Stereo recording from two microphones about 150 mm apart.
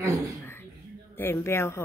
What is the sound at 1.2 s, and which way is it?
Speech, 15° left (ahead or behind).